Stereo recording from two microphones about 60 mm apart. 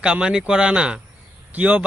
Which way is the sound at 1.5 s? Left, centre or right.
Right.